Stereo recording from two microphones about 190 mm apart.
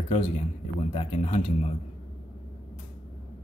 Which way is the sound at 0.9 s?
30° left (ahead or behind).